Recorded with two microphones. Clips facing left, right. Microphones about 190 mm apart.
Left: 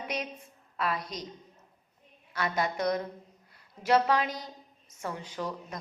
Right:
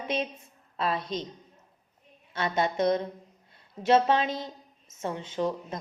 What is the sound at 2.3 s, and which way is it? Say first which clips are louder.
A woman's voice: right 3 dB; 25° right (ahead or behind).